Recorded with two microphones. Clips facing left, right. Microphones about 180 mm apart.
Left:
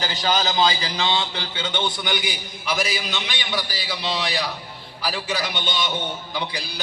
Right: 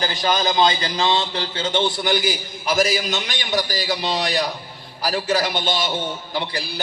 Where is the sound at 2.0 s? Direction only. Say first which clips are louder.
Right 6 dB; 40° right (ahead or behind).